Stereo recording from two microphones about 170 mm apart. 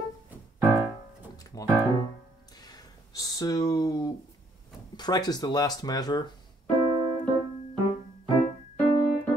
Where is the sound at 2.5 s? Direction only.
25° left (ahead or behind).